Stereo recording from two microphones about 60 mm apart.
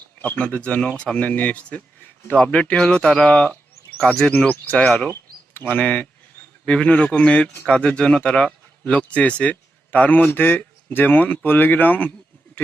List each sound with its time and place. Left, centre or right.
0.2 s speech: left
4.4 s speech: left